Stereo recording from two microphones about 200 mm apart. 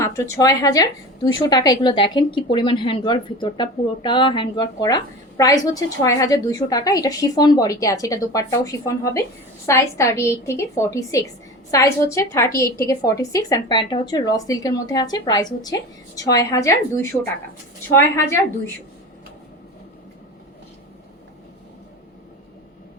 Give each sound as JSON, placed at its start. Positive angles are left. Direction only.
{"t": 0.0, "sound": "a woman's voice", "side_deg": 15}